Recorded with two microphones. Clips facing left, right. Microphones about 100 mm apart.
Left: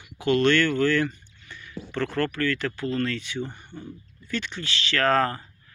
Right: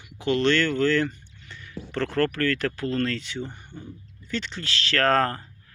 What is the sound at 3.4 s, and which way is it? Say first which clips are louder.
Speech: left 1 dB; 15° left (ahead or behind).